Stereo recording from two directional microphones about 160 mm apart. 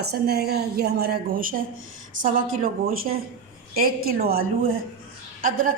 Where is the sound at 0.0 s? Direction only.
80° right.